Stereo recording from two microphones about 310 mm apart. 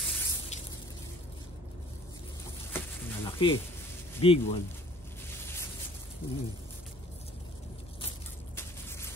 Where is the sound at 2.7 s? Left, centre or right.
Centre.